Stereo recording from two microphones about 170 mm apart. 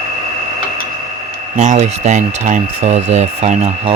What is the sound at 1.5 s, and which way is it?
Speech, 45° right (ahead or behind).